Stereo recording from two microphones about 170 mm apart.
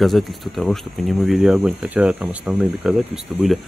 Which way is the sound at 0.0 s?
Centre (ahead or behind).